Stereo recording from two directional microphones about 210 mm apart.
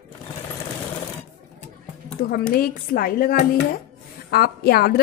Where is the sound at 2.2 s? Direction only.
45° left (ahead or behind).